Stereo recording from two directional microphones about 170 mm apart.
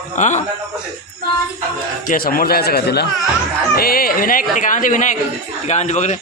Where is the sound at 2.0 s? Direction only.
60° left (ahead or behind).